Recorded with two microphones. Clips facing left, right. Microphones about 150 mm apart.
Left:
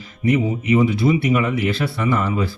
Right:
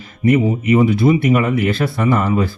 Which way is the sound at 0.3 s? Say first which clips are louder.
Right 4 dB; 50° right (ahead or behind).